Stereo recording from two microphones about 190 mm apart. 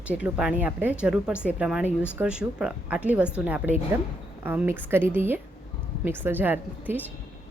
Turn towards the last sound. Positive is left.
turn(degrees=-10)  # may be behind; listen again after turning